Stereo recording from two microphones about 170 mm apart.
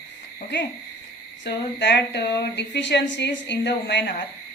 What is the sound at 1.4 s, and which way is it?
Speech, 90° left.